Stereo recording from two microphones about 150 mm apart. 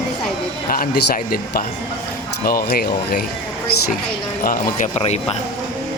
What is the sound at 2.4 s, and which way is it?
Speech, 85° left.